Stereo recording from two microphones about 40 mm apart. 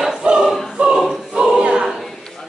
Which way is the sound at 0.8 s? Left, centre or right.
Right.